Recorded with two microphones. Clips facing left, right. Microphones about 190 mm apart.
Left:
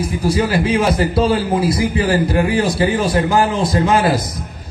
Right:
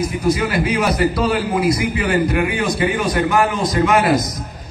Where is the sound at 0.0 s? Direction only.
30° left (ahead or behind).